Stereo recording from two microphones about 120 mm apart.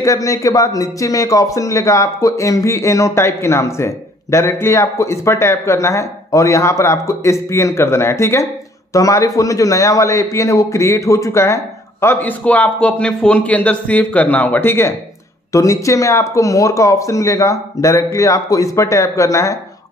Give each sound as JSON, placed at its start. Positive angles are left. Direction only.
{"t": 0.0, "sound": "a man's voice", "side_deg": 25}